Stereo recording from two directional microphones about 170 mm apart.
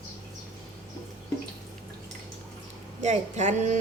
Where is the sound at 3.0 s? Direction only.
45° right (ahead or behind).